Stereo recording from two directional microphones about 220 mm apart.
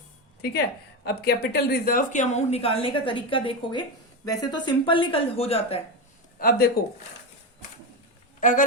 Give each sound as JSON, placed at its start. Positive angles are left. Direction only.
{"t": 1.0, "sound": "a woman's voice", "side_deg": 45}
{"t": 6.4, "sound": "speech", "side_deg": 45}
{"t": 8.4, "sound": "speech", "side_deg": 35}